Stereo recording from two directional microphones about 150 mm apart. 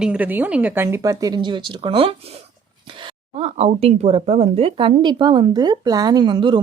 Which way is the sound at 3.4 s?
45° right (ahead or behind).